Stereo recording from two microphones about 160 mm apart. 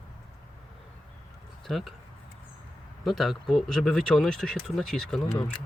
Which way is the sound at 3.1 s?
Centre (ahead or behind).